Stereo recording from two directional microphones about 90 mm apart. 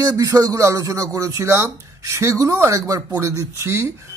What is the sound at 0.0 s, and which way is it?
Speech, 40° right (ahead or behind).